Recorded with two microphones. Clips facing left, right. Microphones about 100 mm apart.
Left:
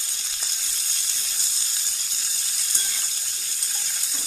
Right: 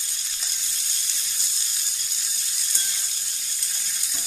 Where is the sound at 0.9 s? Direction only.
90° left.